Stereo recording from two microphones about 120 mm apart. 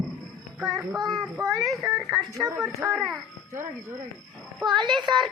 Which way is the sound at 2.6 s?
15° right (ahead or behind).